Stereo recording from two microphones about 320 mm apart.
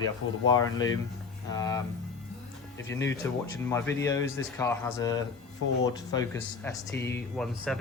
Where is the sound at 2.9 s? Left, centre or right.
Centre.